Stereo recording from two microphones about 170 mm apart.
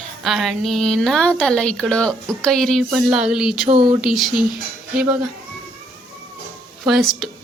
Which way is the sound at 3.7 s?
30° right (ahead or behind).